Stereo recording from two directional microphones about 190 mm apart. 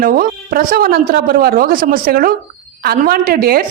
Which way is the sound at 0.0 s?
50° right (ahead or behind).